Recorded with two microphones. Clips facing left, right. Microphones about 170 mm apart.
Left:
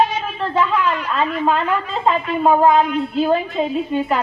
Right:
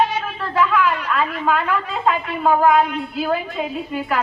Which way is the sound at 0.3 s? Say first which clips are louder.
Left 1 dB; 25° left (ahead or behind).